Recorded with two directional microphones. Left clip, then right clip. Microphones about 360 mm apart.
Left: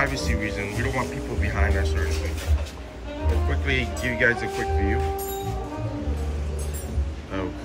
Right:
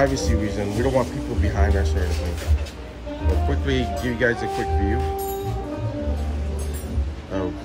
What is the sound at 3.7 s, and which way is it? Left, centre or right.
Speech, left.